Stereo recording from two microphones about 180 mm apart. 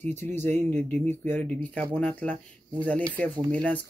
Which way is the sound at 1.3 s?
10° left (ahead or behind).